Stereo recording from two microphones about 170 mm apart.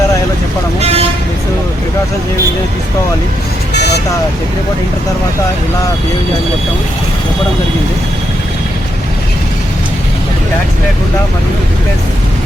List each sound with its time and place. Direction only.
0.8 s vehicle: 35° right (ahead or behind)